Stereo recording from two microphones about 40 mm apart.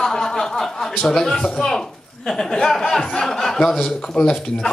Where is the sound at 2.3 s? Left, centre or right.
Centre.